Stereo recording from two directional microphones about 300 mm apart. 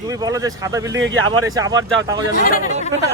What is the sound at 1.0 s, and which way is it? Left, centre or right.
Speech, right.